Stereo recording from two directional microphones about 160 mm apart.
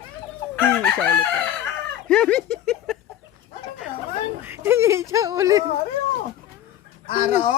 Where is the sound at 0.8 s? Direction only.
5° left (ahead or behind).